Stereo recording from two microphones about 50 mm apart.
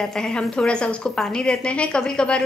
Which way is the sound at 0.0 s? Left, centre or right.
Centre.